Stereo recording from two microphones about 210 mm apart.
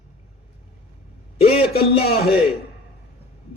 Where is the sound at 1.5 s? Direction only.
25° left (ahead or behind).